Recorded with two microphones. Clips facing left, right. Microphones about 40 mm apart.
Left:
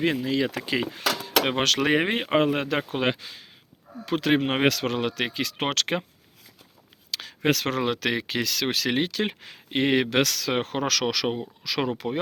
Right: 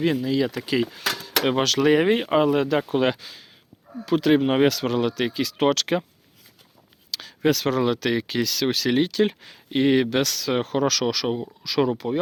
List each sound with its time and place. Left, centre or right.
0.0 s speech: left
0.6 s speech: left
2.7 s speech: left
4.0 s speech: left
7.1 s speech: left
10.8 s speech: left
11.3 s speech: left
11.9 s speech: left